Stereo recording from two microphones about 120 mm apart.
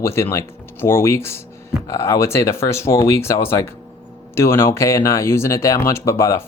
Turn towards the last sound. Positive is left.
turn(degrees=25)  # may be behind; listen again after turning